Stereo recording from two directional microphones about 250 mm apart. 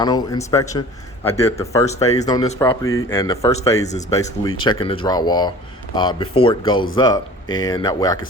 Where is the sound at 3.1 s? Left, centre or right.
Centre.